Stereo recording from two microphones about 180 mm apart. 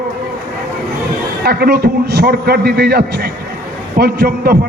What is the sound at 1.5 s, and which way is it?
A man's voice, 60° right (ahead or behind).